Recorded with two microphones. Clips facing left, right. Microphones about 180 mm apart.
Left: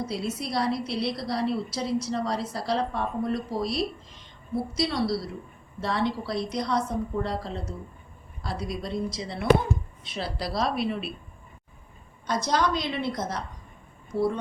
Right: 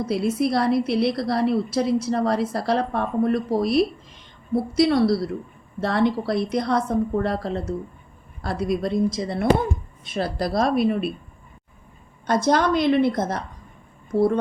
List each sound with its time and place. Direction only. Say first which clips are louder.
0.0 s a woman's voice: right 9 dB; 55° right (ahead or behind)
12.2 s a woman's voice: right 6 dB; 55° right (ahead or behind)